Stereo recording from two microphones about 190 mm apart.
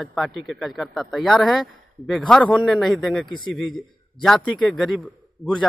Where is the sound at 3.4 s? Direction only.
25° left (ahead or behind).